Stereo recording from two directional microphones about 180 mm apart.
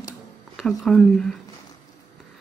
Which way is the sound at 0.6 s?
Centre (ahead or behind).